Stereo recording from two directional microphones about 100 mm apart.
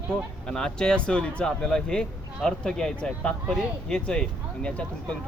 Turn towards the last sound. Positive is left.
turn(degrees=10)  # may be behind; listen again after turning